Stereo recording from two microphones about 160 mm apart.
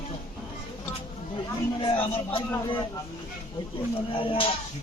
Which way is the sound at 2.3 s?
30° left (ahead or behind).